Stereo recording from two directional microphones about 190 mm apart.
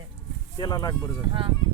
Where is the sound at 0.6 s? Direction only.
20° left (ahead or behind).